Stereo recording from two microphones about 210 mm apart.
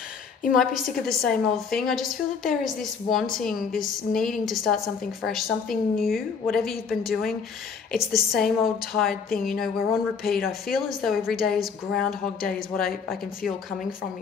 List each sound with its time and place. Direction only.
0.5 s a woman's voice: centre (ahead or behind)